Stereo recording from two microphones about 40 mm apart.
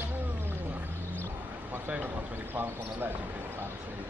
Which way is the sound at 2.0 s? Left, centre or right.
Right.